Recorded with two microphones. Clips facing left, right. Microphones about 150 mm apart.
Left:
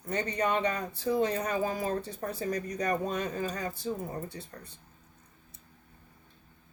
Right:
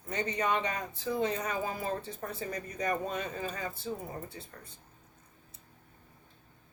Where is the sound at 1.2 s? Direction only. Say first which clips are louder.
Left 3 dB; 35° left (ahead or behind).